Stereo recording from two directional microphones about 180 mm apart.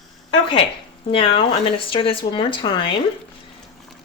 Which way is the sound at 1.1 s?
30° left (ahead or behind).